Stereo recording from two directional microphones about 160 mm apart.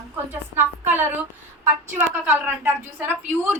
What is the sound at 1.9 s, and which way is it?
A woman's voice, 10° right (ahead or behind).